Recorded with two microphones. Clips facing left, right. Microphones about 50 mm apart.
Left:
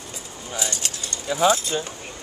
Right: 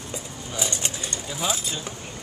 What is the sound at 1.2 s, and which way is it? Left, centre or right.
Speech, left.